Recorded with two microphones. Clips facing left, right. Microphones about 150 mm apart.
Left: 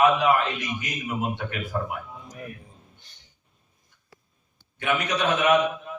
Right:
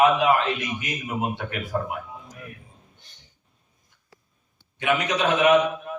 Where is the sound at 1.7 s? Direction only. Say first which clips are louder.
Right 2 dB; 40° right (ahead or behind).